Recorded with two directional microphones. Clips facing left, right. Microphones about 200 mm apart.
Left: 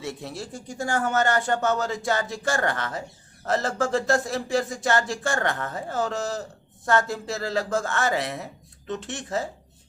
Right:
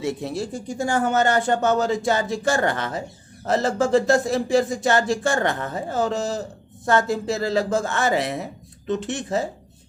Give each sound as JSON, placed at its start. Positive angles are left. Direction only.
{"t": 0.0, "sound": "speech", "side_deg": -20}